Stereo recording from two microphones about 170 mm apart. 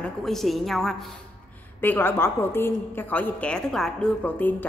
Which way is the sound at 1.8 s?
10° left (ahead or behind).